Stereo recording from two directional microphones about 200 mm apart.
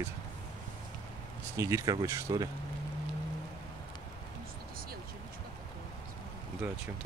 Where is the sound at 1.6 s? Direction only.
15° right (ahead or behind).